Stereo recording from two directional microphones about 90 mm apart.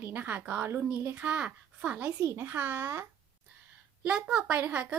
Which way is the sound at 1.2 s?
10° right (ahead or behind).